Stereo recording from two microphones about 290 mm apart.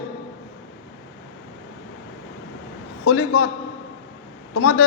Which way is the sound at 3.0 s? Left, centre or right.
Left.